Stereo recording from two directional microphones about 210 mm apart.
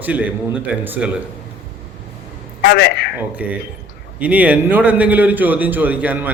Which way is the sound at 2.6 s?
50° left (ahead or behind).